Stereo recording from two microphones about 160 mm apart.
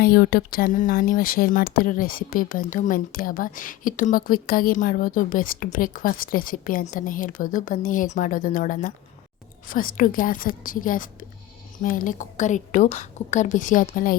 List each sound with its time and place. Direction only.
0.0 s a woman's voice: 70° left (ahead or behind)